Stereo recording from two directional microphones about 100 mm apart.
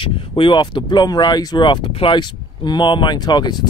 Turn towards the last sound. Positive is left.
turn(degrees=45)  # may be behind; listen again after turning